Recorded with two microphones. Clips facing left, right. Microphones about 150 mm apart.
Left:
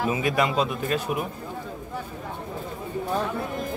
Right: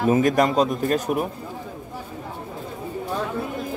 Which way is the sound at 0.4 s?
40° right (ahead or behind).